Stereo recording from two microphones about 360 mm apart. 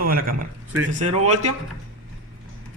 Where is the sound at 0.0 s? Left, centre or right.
Right.